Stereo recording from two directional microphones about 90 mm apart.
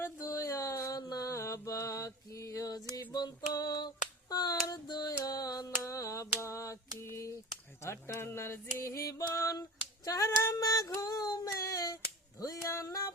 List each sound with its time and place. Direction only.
0.2 s music: 40° left (ahead or behind)
3.1 s female singing: 45° left (ahead or behind)
4.3 s a sound: 45° left (ahead or behind)
12.4 s female singing: 40° left (ahead or behind)